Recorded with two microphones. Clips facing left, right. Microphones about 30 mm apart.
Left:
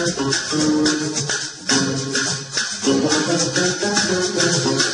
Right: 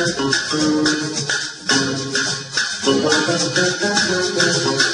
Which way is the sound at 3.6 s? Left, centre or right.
Right.